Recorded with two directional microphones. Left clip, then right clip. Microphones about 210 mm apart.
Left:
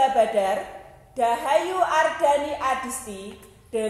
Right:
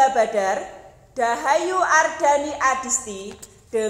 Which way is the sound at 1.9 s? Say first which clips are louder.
Right 3 dB; centre (ahead or behind).